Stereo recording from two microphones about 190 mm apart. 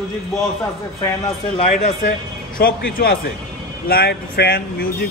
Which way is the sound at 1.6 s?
35° left (ahead or behind).